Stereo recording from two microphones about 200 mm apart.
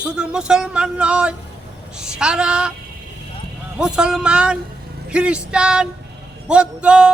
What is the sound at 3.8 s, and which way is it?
A man's voice, 5° right (ahead or behind).